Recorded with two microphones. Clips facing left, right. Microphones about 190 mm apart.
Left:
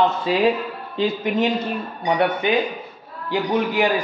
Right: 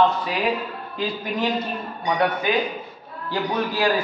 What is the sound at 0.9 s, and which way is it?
Speech, 25° left (ahead or behind).